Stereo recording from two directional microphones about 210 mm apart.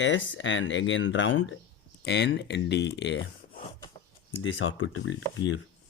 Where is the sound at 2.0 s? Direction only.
55° left (ahead or behind).